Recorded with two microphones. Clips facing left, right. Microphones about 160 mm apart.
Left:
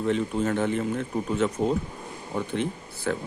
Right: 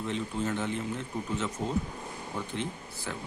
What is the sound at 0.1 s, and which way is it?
Speech, 55° left (ahead or behind).